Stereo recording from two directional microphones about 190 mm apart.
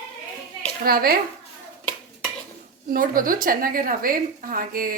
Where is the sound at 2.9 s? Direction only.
50° right (ahead or behind).